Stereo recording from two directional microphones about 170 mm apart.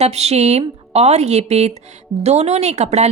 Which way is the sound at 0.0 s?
40° right (ahead or behind).